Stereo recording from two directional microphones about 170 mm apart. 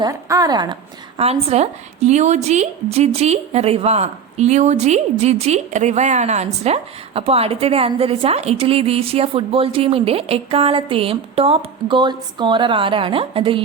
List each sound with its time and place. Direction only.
0.0 s a woman's voice: 20° right (ahead or behind)
1.2 s a woman's voice: 35° right (ahead or behind)